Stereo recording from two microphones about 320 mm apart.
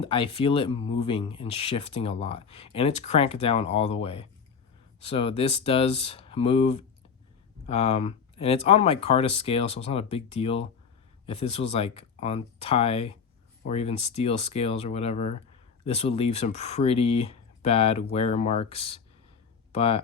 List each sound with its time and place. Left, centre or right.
0.0 s speech: centre